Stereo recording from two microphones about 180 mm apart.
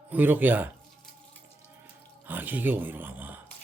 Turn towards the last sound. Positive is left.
turn(degrees=-10)  # may be behind; listen again after turning